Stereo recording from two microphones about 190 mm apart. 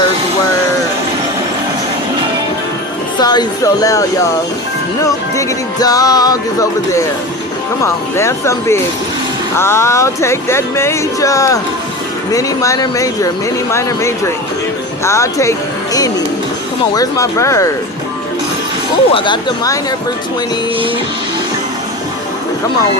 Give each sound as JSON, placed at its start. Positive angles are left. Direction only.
{"t": 3.2, "sound": "music", "side_deg": 20}
{"t": 5.0, "sound": "music", "side_deg": 15}
{"t": 7.9, "sound": "speech", "side_deg": 15}
{"t": 19.1, "sound": "music", "side_deg": 25}